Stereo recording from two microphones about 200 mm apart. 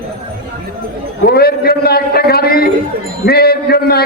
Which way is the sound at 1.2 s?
50° left (ahead or behind).